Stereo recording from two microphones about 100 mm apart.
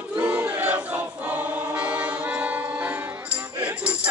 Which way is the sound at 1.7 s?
15° right (ahead or behind).